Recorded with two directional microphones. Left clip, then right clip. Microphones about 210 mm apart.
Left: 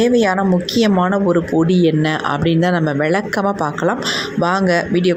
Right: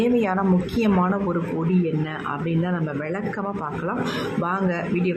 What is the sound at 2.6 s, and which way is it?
A woman's voice, 30° left (ahead or behind).